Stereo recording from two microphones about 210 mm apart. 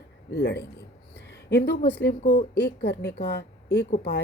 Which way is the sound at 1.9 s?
45° left (ahead or behind).